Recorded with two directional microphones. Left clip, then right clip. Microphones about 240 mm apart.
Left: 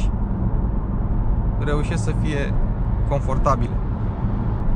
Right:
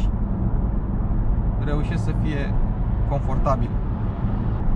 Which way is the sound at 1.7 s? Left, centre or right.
Left.